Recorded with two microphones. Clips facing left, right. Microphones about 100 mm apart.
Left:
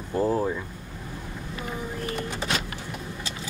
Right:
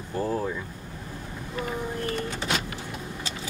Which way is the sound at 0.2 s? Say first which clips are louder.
Left 4 dB; 15° left (ahead or behind).